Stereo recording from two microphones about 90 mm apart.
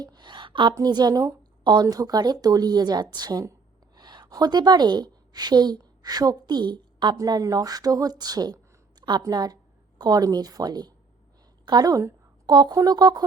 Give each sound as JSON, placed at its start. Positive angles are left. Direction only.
{"t": 0.0, "sound": "a woman's voice", "side_deg": -55}
{"t": 0.7, "sound": "a woman's voice", "side_deg": -45}
{"t": 1.6, "sound": "a woman's voice", "side_deg": -50}
{"t": 7.2, "sound": "a woman's voice", "side_deg": -40}
{"t": 9.0, "sound": "a sound", "side_deg": -55}
{"t": 9.2, "sound": "a woman's voice", "side_deg": -45}
{"t": 12.5, "sound": "a woman's voice", "side_deg": -55}